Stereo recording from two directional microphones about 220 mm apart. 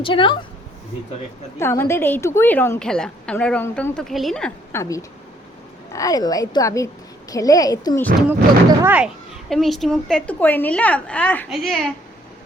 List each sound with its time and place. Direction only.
0.0 s a woman's voice: 20° left (ahead or behind)
1.5 s a woman's voice: 10° left (ahead or behind)
8.8 s a woman's voice: 10° right (ahead or behind)